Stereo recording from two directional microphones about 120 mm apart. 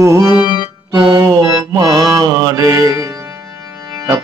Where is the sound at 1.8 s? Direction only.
30° right (ahead or behind).